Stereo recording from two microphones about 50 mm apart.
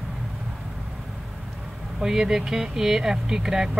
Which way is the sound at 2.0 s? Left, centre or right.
Centre.